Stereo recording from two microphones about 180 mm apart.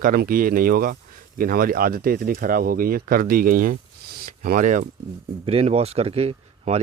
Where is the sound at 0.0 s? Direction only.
55° right (ahead or behind).